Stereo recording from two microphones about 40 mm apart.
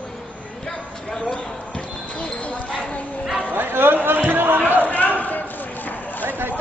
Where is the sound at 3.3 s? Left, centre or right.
Right.